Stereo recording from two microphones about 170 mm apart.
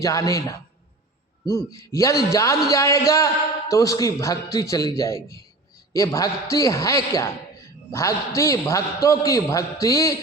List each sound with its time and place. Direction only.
0.0 s a man's voice: 20° left (ahead or behind)